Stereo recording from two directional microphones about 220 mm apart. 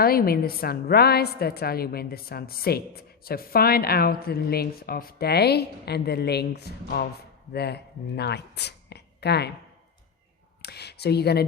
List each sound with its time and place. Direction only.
0.0 s a woman's voice: 45° left (ahead or behind)
10.6 s speech: 50° left (ahead or behind)